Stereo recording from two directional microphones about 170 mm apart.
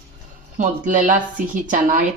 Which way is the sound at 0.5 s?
50° right (ahead or behind).